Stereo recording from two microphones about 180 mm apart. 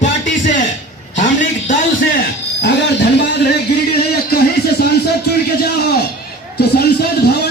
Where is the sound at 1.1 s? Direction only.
45° left (ahead or behind).